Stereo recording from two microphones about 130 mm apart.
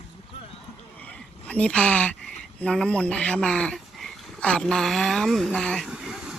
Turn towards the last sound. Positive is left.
turn(degrees=-5)  # may be behind; listen again after turning